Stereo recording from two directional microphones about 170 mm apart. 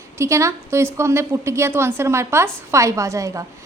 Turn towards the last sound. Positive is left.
turn(degrees=-20)  # may be behind; listen again after turning